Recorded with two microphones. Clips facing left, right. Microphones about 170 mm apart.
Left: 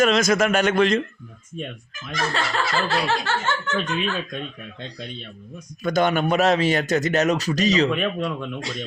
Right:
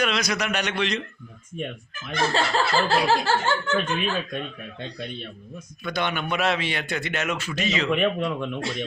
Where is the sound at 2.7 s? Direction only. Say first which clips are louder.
Right 2 dB; 30° right (ahead or behind).